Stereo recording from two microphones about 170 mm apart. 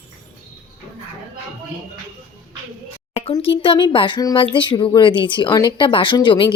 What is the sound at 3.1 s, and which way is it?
Speech, 35° left (ahead or behind).